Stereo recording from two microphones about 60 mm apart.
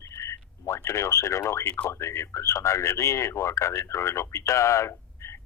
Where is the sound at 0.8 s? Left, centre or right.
Left.